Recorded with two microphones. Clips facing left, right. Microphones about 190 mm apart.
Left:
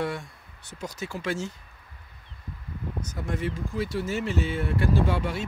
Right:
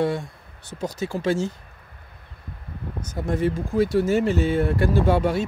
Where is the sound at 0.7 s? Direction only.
30° right (ahead or behind).